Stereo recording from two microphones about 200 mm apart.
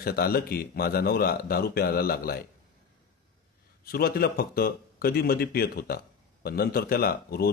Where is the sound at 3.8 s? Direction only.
50° left (ahead or behind).